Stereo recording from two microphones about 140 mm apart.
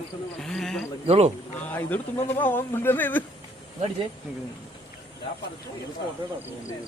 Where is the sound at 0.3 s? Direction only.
5° left (ahead or behind).